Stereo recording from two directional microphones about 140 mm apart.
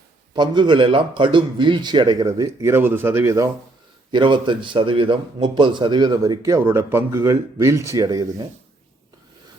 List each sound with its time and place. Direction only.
0.3 s a man's voice: 35° right (ahead or behind)
4.1 s a man's voice: 35° right (ahead or behind)